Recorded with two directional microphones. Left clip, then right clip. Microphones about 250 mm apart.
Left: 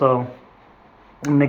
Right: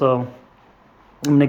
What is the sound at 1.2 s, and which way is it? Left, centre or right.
Speech, right.